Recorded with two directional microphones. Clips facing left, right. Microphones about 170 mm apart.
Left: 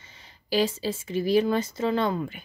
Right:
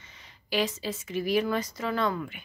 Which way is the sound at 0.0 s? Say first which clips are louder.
Left 1 dB; 30° left (ahead or behind).